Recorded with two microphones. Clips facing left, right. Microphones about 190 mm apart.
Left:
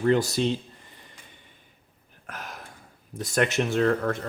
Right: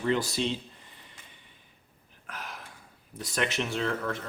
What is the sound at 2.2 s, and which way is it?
Gasp, 45° left (ahead or behind).